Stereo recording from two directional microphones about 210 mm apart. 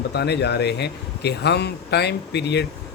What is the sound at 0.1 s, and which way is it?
A man's voice, 50° left (ahead or behind).